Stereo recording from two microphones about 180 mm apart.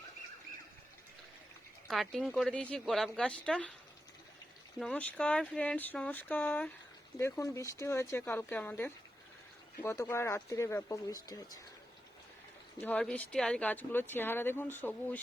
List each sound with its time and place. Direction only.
1.9 s speech: centre (ahead or behind)
4.8 s speech: 5° left (ahead or behind)
12.8 s speech: 5° left (ahead or behind)